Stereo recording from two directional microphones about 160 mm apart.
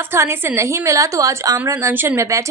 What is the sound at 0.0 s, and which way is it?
A woman's voice, 15° right (ahead or behind).